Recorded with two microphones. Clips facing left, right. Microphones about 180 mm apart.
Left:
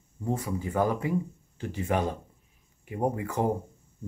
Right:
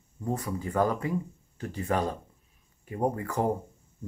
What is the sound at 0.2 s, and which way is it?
Speech, 10° left (ahead or behind).